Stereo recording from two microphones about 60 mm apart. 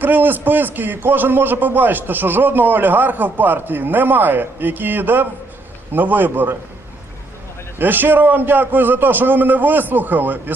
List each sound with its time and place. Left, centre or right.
0.0 s a man's voice: right
7.8 s a man's voice: right